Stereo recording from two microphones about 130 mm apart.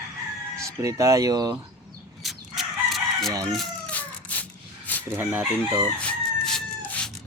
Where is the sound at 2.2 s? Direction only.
Centre (ahead or behind).